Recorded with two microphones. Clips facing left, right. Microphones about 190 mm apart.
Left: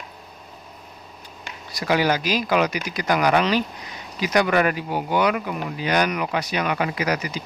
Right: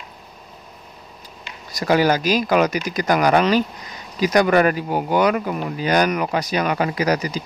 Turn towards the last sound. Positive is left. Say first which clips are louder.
# right 4 dB
turn(degrees=-35)  # may be behind; listen again after turning